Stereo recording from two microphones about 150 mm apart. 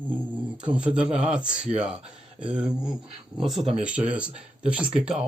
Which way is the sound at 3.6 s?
40° right (ahead or behind).